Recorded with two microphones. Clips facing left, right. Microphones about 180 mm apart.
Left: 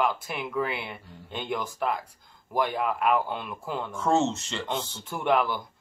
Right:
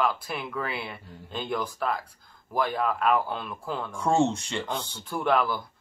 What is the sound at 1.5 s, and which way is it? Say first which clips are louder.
Speech: even; 15° left (ahead or behind).